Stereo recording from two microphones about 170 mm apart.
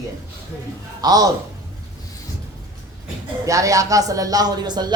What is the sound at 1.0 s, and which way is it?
Speech, 20° right (ahead or behind).